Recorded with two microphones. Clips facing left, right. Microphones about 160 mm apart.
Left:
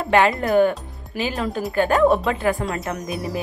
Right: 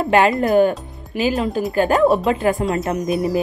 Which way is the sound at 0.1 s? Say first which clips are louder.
Right 2 dB; 25° right (ahead or behind).